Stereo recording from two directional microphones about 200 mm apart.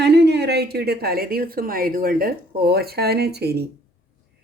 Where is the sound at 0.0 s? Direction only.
55° right (ahead or behind).